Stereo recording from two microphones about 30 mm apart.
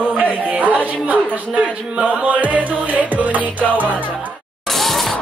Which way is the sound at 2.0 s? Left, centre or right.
Right.